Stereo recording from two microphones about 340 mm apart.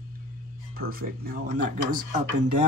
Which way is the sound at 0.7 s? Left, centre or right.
Right.